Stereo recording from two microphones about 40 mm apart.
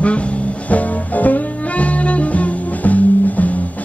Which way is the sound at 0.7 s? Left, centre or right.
Left.